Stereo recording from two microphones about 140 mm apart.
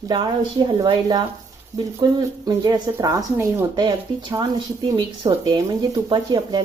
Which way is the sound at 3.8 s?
30° right (ahead or behind).